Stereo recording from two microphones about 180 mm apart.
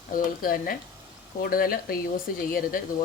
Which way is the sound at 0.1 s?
50° left (ahead or behind).